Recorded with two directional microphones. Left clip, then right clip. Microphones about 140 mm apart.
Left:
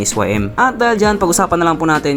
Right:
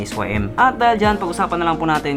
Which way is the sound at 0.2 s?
50° left (ahead or behind).